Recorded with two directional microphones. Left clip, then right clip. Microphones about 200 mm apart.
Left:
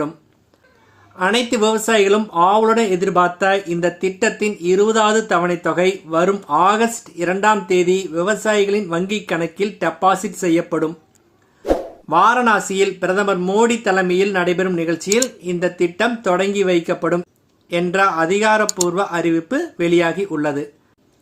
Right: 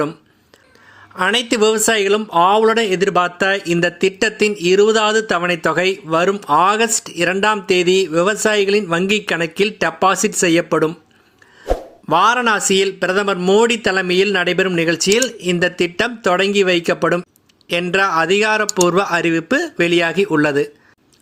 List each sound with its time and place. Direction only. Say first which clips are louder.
1.1 s speech: right 1 dB; 25° right (ahead or behind)
12.0 s speech: even; 25° right (ahead or behind)